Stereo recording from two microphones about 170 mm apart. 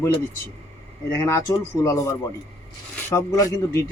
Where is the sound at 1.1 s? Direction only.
15° left (ahead or behind).